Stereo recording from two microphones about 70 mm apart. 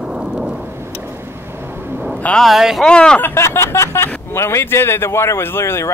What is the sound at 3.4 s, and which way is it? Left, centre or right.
Speech, left.